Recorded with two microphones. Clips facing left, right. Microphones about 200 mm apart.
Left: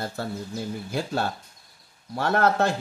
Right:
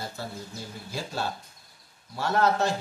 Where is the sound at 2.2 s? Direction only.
60° left (ahead or behind).